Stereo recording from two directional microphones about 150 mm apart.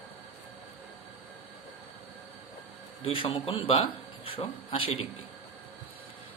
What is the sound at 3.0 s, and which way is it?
A man's voice, 40° left (ahead or behind).